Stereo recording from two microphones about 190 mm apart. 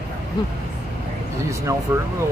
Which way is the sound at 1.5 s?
15° right (ahead or behind).